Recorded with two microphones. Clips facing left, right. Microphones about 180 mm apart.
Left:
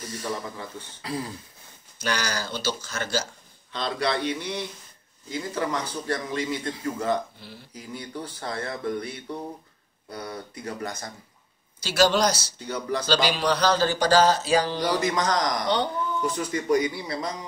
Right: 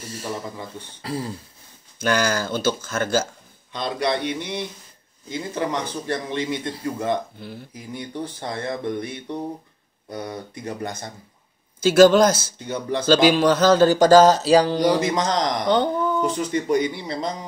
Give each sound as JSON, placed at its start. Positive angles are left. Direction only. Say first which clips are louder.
{"t": 0.0, "sound": "a man's voice", "louder": "right 1 dB", "side_deg": -25}
{"t": 2.0, "sound": "speech", "louder": "right 7 dB", "side_deg": -50}
{"t": 3.7, "sound": "a man's voice", "louder": "right 3 dB", "side_deg": -15}
{"t": 11.8, "sound": "speech", "louder": "right 8 dB", "side_deg": -50}
{"t": 12.6, "sound": "a man's voice", "louder": "right 3 dB", "side_deg": -25}
{"t": 13.0, "sound": "speech", "louder": "right 10 dB", "side_deg": -50}
{"t": 14.8, "sound": "a man's voice", "louder": "right 5 dB", "side_deg": -25}